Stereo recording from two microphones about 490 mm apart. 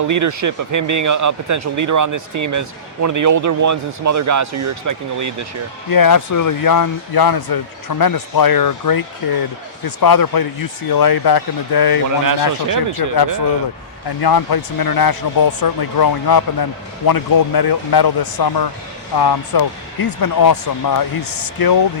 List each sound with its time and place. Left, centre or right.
0.1 s speech: right
5.9 s speech: left
12.2 s speech: right
14.2 s speech: left